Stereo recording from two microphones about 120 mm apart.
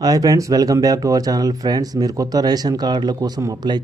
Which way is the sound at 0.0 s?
30° right (ahead or behind).